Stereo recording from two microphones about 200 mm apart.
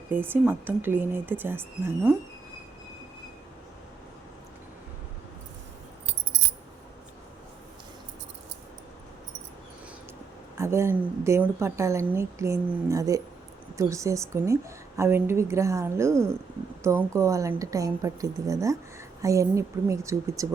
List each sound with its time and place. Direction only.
0.1 s a woman's voice: 10° right (ahead or behind)
10.6 s a woman's voice: 15° right (ahead or behind)